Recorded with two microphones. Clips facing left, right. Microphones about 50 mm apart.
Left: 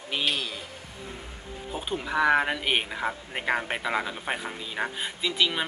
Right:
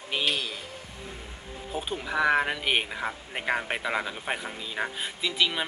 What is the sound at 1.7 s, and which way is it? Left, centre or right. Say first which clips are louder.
Speech: left 1 dB; centre.